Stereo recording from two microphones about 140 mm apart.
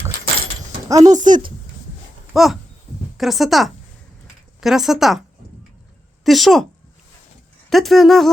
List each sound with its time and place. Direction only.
0.9 s speech: 25° right (ahead or behind)
1.1 s speech: 65° right (ahead or behind)
2.3 s speech: centre (ahead or behind)
6.2 s speech: centre (ahead or behind)
7.7 s speech: centre (ahead or behind)